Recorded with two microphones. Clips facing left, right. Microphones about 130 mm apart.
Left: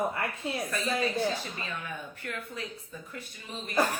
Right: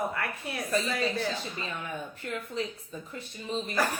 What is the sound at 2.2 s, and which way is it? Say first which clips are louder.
A woman's voice: right 7 dB; 25° right (ahead or behind).